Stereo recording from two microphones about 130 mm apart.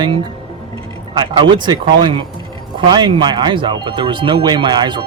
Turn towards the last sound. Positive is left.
turn(degrees=-35)  # may be behind; listen again after turning